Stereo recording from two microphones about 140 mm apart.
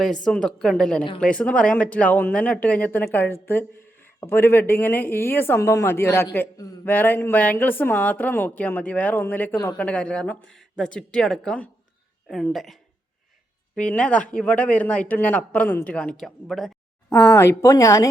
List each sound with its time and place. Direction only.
0.3 s a woman's voice: 5° left (ahead or behind)
17.2 s speech: 20° left (ahead or behind)